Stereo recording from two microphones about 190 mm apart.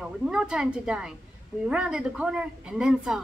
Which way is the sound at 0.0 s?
5° right (ahead or behind).